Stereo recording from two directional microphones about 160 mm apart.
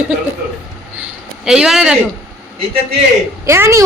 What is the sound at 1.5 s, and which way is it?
Speech, 5° right (ahead or behind).